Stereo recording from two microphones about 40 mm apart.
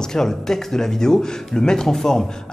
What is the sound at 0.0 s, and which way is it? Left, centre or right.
A man's voice, centre.